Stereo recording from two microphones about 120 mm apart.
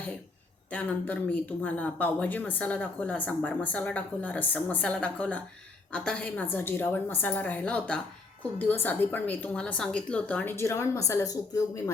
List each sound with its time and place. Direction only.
0.7 s speech: 15° left (ahead or behind)